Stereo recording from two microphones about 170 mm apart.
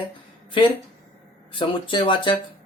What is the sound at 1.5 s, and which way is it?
Speech, 30° left (ahead or behind).